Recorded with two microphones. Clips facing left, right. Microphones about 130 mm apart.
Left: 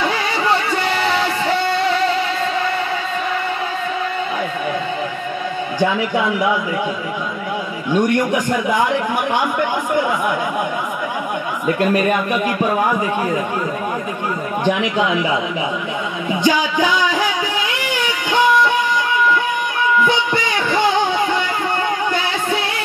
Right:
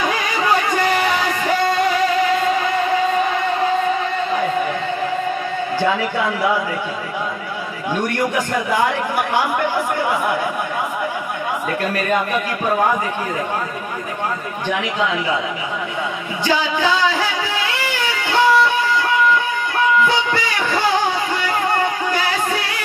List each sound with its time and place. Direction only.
8.1 s a man's voice: 20° left (ahead or behind)
11.6 s speech: 20° left (ahead or behind)
16.4 s music: 15° left (ahead or behind)
20.1 s music: 20° left (ahead or behind)